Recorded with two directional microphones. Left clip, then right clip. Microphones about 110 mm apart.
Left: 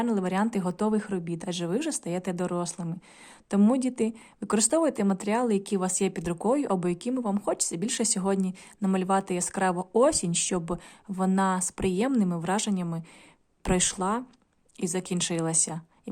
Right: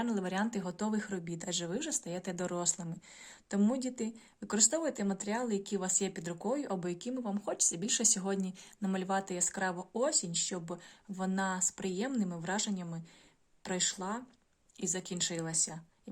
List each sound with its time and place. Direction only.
0.0 s speech: 35° left (ahead or behind)
3.5 s a woman's voice: 45° left (ahead or behind); by 10.8 s 60° left (ahead or behind)
11.2 s a woman's voice: 40° left (ahead or behind)
13.6 s speech: 60° left (ahead or behind)
14.8 s a woman's voice: 45° left (ahead or behind)